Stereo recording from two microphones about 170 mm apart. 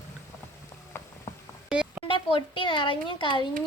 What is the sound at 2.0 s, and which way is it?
Speech, 30° left (ahead or behind).